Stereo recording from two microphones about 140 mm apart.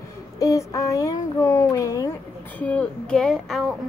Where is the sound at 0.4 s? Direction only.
25° left (ahead or behind).